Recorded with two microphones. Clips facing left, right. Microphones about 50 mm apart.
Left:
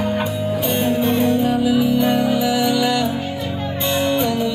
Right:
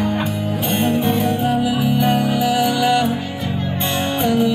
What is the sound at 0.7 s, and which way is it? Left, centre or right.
Music, right.